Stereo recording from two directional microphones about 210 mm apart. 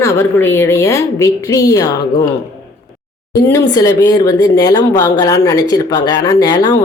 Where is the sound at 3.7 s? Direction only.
15° left (ahead or behind).